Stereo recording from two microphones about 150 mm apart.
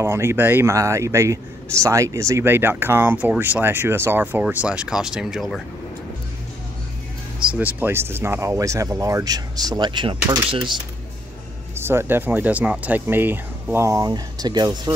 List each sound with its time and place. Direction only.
0.0 s speech: 15° right (ahead or behind); by 5.6 s centre (ahead or behind)
7.4 s speech: 10° right (ahead or behind); by 10.1 s 30° right (ahead or behind)
11.7 s speech: 15° right (ahead or behind)